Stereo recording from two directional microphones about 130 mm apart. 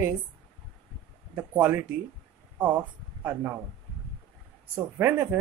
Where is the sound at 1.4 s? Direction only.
10° right (ahead or behind).